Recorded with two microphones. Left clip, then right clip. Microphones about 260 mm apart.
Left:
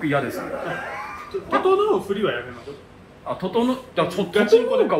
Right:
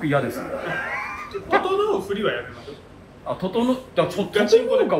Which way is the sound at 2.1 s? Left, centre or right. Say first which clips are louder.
Left 2 dB; left.